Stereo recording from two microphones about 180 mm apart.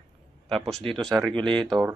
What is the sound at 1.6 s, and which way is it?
Speech, centre (ahead or behind).